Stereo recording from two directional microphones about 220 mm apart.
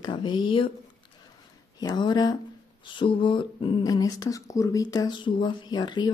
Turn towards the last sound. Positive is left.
turn(degrees=20)  # may be behind; listen again after turning